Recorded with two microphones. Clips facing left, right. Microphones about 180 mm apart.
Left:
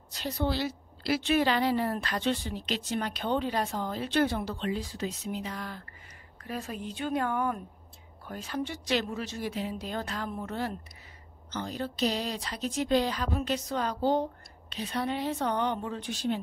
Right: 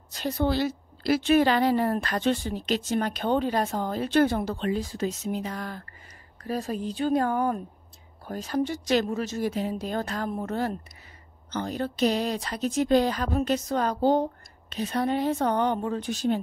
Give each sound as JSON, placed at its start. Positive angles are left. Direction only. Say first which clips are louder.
{"t": 0.1, "sound": "a woman's voice", "louder": "right 5 dB", "side_deg": -50}